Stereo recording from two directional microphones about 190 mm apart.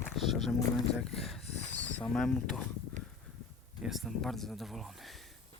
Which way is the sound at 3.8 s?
Centre (ahead or behind).